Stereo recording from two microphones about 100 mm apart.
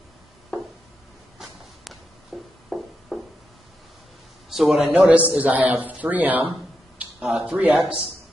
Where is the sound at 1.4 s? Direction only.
Centre (ahead or behind).